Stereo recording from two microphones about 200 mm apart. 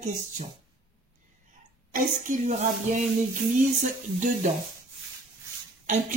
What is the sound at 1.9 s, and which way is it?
Speech, 40° right (ahead or behind).